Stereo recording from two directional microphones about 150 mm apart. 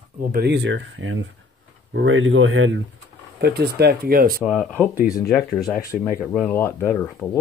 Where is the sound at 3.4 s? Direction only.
90° right.